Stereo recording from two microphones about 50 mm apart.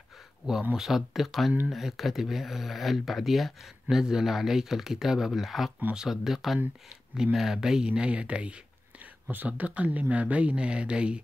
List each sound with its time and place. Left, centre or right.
0.7 s speech: centre; by 8.5 s right
9.3 s speech: right